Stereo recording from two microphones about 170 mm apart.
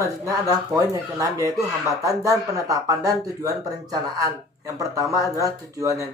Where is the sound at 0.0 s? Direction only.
20° right (ahead or behind).